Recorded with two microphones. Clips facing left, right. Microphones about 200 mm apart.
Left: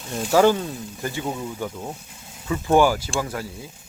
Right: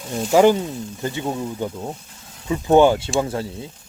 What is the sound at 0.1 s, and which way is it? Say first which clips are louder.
Speech: right 3 dB; 10° right (ahead or behind).